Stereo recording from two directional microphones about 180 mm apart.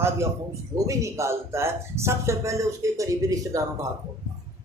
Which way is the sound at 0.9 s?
15° right (ahead or behind).